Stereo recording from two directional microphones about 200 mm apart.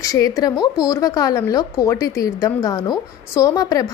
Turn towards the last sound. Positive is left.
turn(degrees=15)  # may be behind; listen again after turning